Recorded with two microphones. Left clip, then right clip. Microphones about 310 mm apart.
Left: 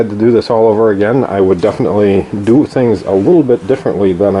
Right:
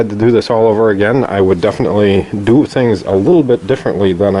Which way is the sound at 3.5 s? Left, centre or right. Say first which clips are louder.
Left 1 dB; centre.